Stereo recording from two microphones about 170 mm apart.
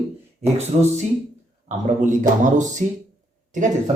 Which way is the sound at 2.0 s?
50° right (ahead or behind).